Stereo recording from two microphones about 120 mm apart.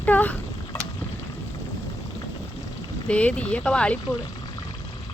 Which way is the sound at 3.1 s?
10° left (ahead or behind).